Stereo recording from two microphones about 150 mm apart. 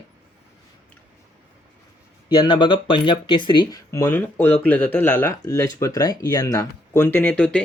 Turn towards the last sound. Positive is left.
turn(degrees=10)  # may be behind; listen again after turning